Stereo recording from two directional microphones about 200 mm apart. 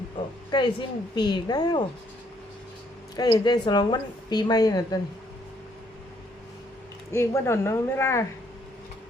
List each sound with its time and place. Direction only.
0.5 s a woman's voice: 20° left (ahead or behind)
3.2 s a woman's voice: 20° left (ahead or behind)
7.1 s speech: 15° left (ahead or behind)